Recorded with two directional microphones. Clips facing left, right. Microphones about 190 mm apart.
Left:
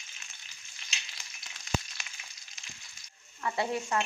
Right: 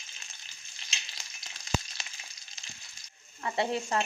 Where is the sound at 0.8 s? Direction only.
30° right (ahead or behind).